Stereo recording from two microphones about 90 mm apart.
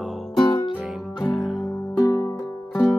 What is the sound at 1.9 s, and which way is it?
Music, 40° left (ahead or behind).